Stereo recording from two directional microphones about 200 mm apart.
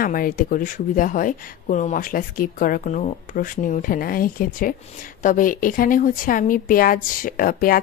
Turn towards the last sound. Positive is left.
turn(degrees=45)  # may be behind; listen again after turning